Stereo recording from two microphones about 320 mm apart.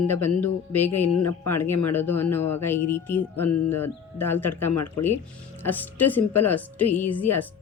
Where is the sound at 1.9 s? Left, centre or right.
Centre.